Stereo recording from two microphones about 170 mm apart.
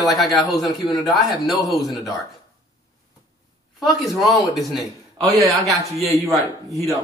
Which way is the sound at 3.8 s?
Centre (ahead or behind).